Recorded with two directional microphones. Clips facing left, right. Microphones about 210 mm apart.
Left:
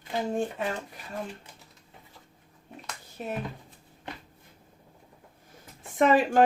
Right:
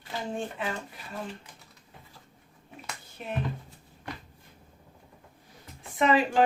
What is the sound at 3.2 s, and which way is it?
Speech, 40° left (ahead or behind).